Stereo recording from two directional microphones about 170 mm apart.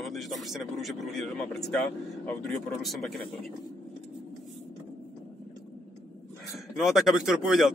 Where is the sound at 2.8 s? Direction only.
Centre (ahead or behind).